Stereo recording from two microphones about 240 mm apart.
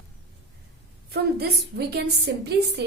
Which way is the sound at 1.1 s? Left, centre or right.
Right.